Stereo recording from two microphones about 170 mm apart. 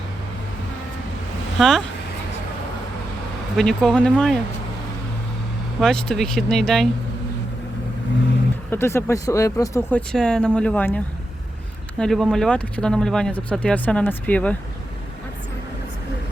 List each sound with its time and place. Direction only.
1.5 s speech: centre (ahead or behind)
3.6 s speech: 5° left (ahead or behind)
5.8 s speech: 5° left (ahead or behind)
8.7 s speech: 15° left (ahead or behind)
10.1 s speech: 5° left (ahead or behind)